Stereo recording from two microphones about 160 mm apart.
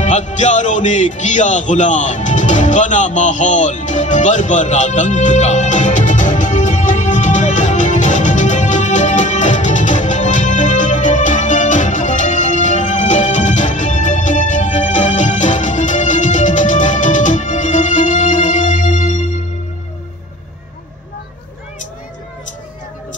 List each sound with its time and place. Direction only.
0.0 s music: 50° left (ahead or behind)